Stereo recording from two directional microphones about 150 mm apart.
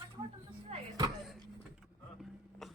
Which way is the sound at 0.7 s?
45° right (ahead or behind).